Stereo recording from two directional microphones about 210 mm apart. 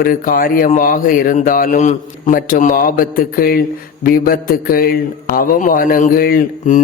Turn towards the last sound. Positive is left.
turn(degrees=40)  # may be behind; listen again after turning